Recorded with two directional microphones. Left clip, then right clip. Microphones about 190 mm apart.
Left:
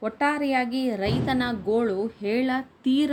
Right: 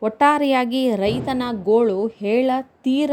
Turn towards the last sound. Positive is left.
turn(degrees=-30)  # may be behind; listen again after turning